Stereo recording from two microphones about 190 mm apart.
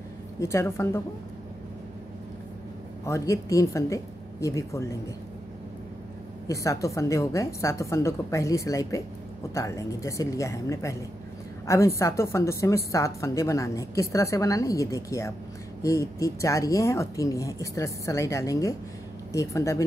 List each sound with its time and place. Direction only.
0.4 s a woman's voice: 15° left (ahead or behind)
3.1 s a woman's voice: 15° left (ahead or behind)
6.4 s a woman's voice: 15° left (ahead or behind)